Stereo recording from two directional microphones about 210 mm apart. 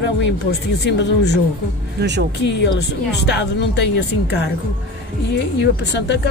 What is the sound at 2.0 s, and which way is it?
Speech, 55° right (ahead or behind).